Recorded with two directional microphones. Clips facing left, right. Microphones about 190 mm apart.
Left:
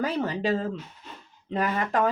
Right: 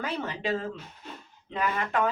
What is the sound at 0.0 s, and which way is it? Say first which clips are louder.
A woman's voice: left 5 dB; 35° left (ahead or behind).